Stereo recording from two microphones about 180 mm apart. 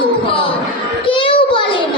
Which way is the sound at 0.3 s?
30° left (ahead or behind).